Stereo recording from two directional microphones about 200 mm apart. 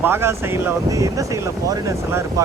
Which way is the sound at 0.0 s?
10° right (ahead or behind).